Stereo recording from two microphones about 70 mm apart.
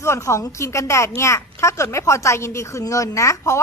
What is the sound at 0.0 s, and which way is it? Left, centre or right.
A woman's voice, left.